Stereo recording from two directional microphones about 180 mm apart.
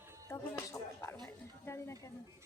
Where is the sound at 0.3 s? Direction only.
15° left (ahead or behind).